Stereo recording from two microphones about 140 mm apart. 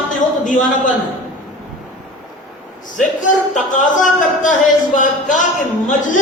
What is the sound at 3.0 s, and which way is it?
Speech, 65° left (ahead or behind).